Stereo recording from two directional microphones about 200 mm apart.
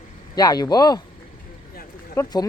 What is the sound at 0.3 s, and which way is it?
Speech, 20° left (ahead or behind).